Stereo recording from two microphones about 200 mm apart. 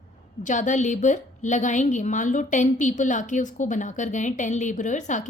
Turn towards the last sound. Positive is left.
turn(degrees=35)  # may be behind; listen again after turning